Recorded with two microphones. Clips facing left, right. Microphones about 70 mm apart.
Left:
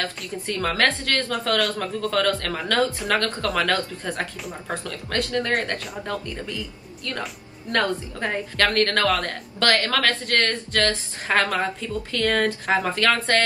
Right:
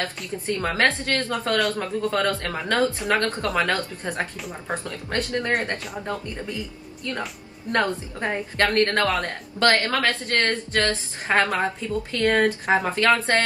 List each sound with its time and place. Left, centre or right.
0.0 s a woman's voice: right
7.7 s a woman's voice: right